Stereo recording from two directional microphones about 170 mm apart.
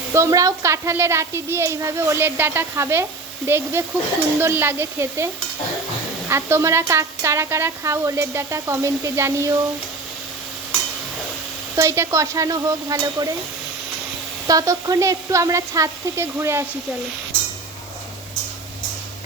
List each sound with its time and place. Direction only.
0.1 s a woman's voice: 15° right (ahead or behind)
11.8 s speech: 15° right (ahead or behind)
14.4 s a woman's voice: 20° right (ahead or behind)